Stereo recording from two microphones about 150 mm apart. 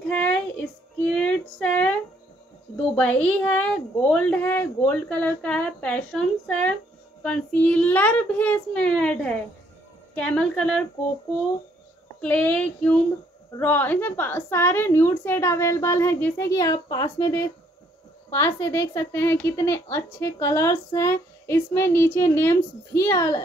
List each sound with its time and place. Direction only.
0.1 s child singing: 10° left (ahead or behind)
3.0 s a woman's voice: 10° left (ahead or behind)
12.2 s a woman's voice: 10° left (ahead or behind)